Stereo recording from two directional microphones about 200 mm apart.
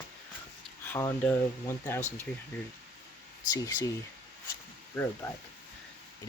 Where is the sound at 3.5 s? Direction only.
15° left (ahead or behind).